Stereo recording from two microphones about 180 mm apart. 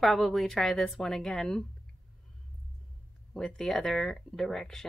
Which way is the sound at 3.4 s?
Centre (ahead or behind).